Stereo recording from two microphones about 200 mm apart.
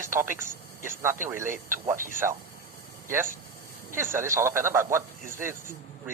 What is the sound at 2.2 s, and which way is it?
Speech, 10° right (ahead or behind).